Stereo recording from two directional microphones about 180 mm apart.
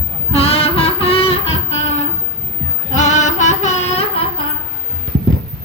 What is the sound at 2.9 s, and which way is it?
Singing, 40° left (ahead or behind).